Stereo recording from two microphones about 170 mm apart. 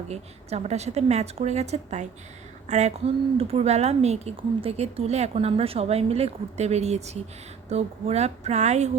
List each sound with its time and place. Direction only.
0.1 s speech: 40° right (ahead or behind)